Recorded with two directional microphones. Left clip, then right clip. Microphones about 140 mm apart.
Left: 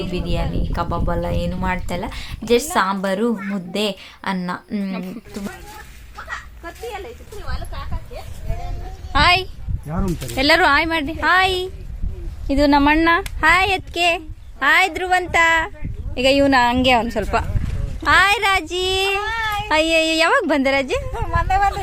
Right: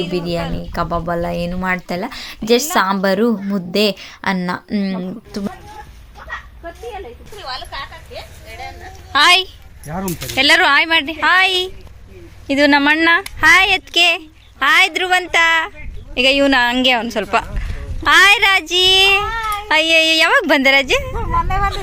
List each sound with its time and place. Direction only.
0.1 s a woman's voice: 30° right (ahead or behind)
7.4 s a sound: 90° left
9.1 s a woman's voice: 5° left (ahead or behind)